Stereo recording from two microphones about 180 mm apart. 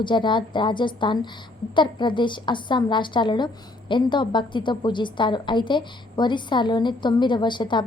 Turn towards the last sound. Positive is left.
turn(degrees=25)  # may be behind; listen again after turning